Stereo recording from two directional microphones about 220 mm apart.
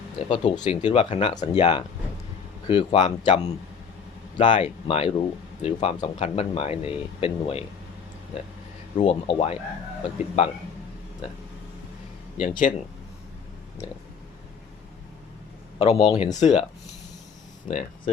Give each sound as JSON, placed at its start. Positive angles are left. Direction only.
{"t": 0.2, "sound": "speech", "side_deg": 25}
{"t": 4.4, "sound": "speech", "side_deg": 35}
{"t": 9.0, "sound": "speech", "side_deg": 30}
{"t": 12.4, "sound": "speech", "side_deg": 35}
{"t": 15.8, "sound": "speech", "side_deg": 25}
{"t": 17.7, "sound": "speech", "side_deg": 35}